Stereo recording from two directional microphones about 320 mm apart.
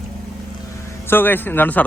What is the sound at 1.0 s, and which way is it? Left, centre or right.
Speech, centre.